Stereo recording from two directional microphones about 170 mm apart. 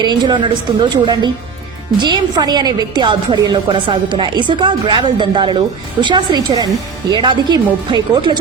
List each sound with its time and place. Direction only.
0.0 s a woman's voice: 25° right (ahead or behind)